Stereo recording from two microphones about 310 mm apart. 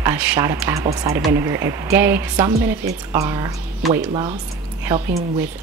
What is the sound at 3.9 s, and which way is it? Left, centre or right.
Speech, right.